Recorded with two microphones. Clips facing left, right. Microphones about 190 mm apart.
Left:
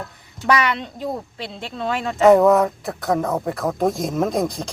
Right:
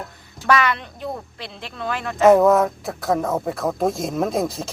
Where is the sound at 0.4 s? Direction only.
20° left (ahead or behind).